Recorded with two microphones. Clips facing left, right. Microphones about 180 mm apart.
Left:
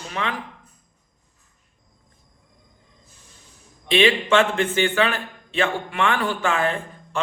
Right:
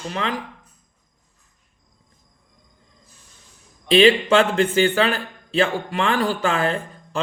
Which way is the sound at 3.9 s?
40° right (ahead or behind).